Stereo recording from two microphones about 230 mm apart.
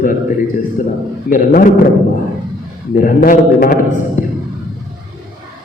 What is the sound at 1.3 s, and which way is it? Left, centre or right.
Speech, left.